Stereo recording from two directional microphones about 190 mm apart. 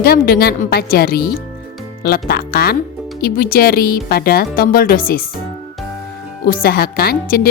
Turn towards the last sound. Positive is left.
turn(degrees=50)  # may be behind; listen again after turning